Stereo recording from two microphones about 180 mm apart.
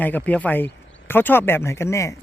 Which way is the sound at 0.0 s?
10° left (ahead or behind).